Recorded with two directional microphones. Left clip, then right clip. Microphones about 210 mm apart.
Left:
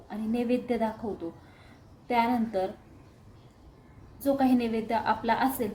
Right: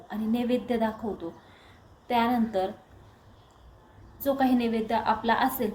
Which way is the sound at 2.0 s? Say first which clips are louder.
Right 1 dB; 5° left (ahead or behind).